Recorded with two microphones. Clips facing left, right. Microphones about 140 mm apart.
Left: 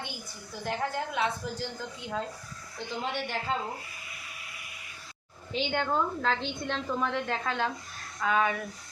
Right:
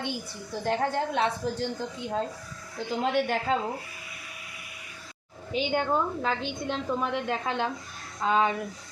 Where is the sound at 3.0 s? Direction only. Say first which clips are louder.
Right 8 dB; 45° right (ahead or behind).